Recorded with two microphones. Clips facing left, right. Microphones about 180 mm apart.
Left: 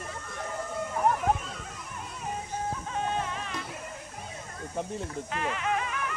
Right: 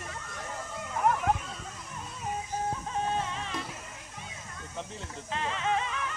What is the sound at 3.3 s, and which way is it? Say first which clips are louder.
Music: even; 25° right (ahead or behind).